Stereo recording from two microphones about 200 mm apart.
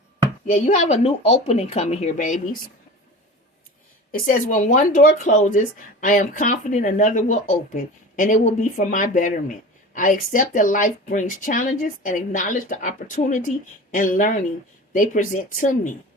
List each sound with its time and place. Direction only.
0.4 s speech: 35° left (ahead or behind)
4.1 s speech: 40° left (ahead or behind)